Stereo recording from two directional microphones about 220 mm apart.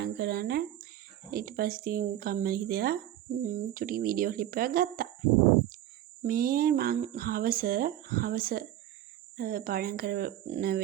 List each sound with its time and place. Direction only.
0.0 s speech: 45° right (ahead or behind)
6.2 s speech: 40° right (ahead or behind)